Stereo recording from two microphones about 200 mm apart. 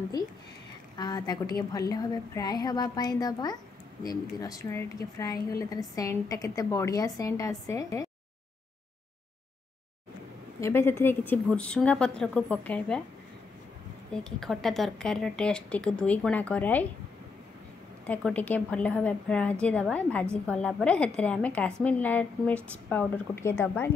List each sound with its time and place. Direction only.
0.2 s a woman's voice: 20° left (ahead or behind)
10.6 s speech: 10° left (ahead or behind)
14.1 s a woman's voice: centre (ahead or behind)
18.0 s a woman's voice: 5° left (ahead or behind)